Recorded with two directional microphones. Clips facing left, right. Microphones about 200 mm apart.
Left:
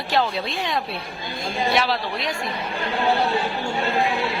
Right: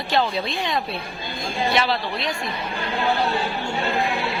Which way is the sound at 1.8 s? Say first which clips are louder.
Even; 5° left (ahead or behind).